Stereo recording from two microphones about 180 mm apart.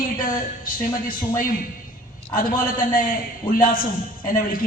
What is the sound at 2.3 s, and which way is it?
A man's voice, 50° left (ahead or behind).